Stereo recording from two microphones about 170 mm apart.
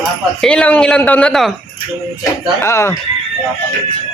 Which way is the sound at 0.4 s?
5° left (ahead or behind).